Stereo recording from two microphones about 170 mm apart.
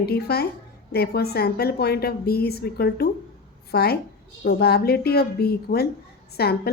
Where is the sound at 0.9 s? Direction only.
70° left (ahead or behind).